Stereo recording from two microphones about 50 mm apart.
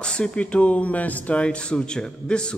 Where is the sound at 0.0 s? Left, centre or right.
Centre.